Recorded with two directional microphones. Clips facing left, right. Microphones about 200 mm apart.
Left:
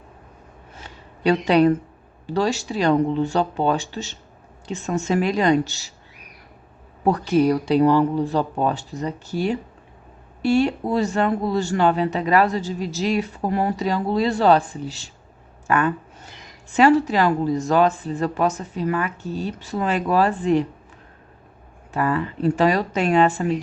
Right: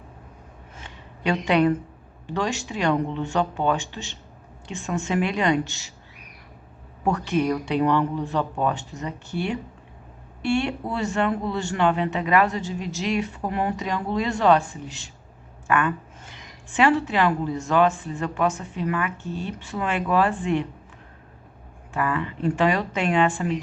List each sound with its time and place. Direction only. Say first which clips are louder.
0.8 s a sound: left 6 dB; 35° left (ahead or behind)
2.2 s speech: left 5 dB; 35° left (ahead or behind)
7.0 s speech: left 5 dB; 35° left (ahead or behind)
21.9 s speech: left 4 dB; 35° left (ahead or behind)